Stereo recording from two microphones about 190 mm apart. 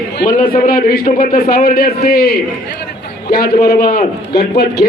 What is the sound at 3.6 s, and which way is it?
A man's voice, 50° left (ahead or behind).